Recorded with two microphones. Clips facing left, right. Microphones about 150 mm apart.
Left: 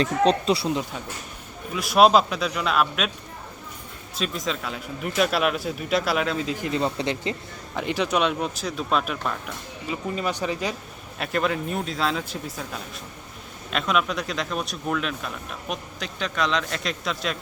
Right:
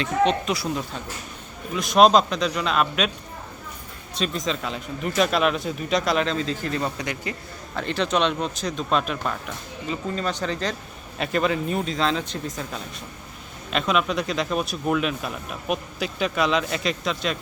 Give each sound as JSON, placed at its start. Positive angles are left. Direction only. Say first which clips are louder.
{"t": 0.0, "sound": "speech", "louder": "left 1 dB", "side_deg": 35}
{"t": 1.7, "sound": "speech", "louder": "right 1 dB", "side_deg": 5}
{"t": 4.1, "sound": "speech", "louder": "right 2 dB", "side_deg": 5}
{"t": 7.8, "sound": "speech", "louder": "even", "side_deg": 10}
{"t": 9.9, "sound": "speech", "louder": "even", "side_deg": 10}
{"t": 11.2, "sound": "speech", "louder": "right 2 dB", "side_deg": 0}